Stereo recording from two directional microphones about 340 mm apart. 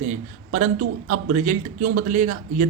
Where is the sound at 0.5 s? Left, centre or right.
Right.